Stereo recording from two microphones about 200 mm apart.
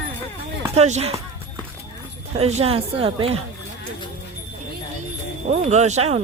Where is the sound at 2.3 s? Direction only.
30° right (ahead or behind).